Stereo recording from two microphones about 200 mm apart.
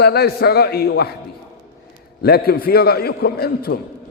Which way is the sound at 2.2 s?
50° left (ahead or behind).